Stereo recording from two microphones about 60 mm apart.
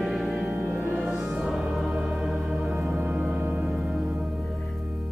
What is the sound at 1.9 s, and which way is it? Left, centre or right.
Organ, centre.